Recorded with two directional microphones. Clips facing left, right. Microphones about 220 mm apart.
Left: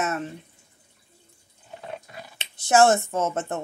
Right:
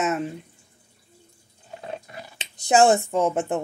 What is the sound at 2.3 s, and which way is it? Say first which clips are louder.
Speech: even; 15° right (ahead or behind).